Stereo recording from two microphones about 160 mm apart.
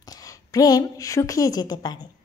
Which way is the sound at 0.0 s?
20° left (ahead or behind).